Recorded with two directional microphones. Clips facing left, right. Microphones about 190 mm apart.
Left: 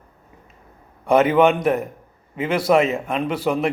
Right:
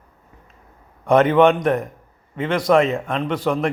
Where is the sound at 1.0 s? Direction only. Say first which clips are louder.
Right 1 dB; 5° left (ahead or behind).